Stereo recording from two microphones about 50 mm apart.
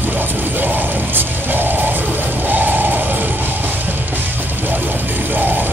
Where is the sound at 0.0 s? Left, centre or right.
Right.